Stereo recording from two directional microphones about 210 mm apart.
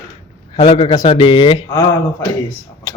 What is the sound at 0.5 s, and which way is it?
A man's voice, 25° left (ahead or behind).